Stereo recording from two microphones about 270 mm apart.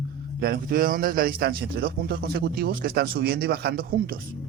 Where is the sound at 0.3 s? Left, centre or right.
Right.